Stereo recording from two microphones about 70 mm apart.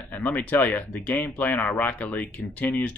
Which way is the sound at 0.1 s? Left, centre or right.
Left.